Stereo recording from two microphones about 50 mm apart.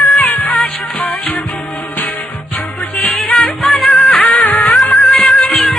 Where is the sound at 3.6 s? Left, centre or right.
Centre.